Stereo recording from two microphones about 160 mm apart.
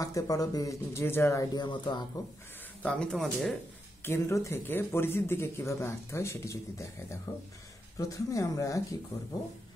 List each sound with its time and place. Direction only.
0.0 s speech: 20° left (ahead or behind)
2.8 s speech: 5° left (ahead or behind)
4.0 s speech: 15° left (ahead or behind)